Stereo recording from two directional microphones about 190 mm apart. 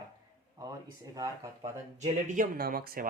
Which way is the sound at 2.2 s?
45° right (ahead or behind).